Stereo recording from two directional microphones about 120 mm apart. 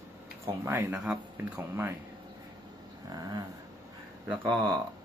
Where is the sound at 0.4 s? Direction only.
20° right (ahead or behind).